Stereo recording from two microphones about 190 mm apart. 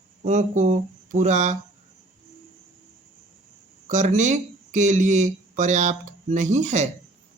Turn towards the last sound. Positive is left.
turn(degrees=-35)  # may be behind; listen again after turning